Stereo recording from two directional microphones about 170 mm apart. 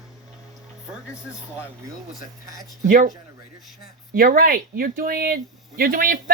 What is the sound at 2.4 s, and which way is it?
Speech, 20° right (ahead or behind).